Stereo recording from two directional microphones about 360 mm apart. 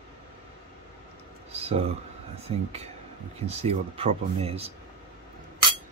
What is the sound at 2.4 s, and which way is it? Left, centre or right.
Speech, centre.